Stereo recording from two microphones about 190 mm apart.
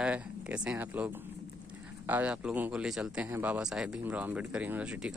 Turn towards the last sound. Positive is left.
turn(degrees=-5)  # may be behind; listen again after turning